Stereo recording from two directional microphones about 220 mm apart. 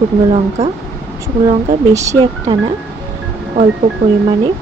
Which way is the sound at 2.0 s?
20° right (ahead or behind).